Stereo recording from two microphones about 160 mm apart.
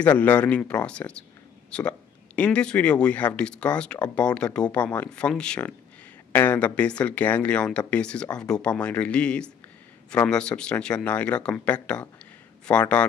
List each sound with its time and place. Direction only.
0.0 s speech: 10° left (ahead or behind)